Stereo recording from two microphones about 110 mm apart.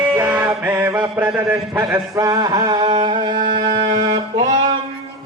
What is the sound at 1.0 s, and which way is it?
Speech, 15° right (ahead or behind).